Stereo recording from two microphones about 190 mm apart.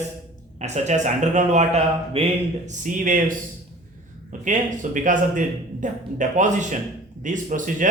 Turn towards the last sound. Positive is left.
turn(degrees=-45)  # may be behind; listen again after turning